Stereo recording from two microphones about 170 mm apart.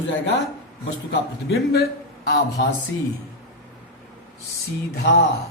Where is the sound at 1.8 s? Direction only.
65° left (ahead or behind).